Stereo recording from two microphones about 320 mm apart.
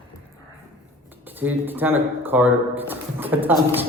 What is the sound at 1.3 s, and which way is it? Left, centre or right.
Speech, centre.